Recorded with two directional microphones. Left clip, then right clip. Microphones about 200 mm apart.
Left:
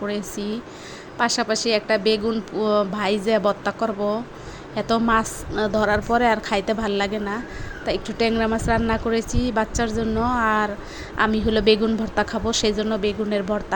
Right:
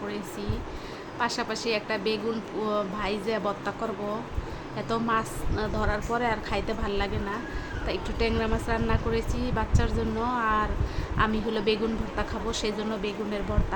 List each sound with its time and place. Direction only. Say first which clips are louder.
0.1 s speech: left 7 dB; 35° left (ahead or behind)